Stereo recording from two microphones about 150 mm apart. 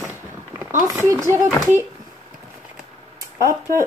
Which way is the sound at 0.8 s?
20° right (ahead or behind).